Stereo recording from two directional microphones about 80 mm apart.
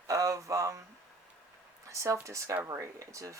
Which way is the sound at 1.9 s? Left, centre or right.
Right.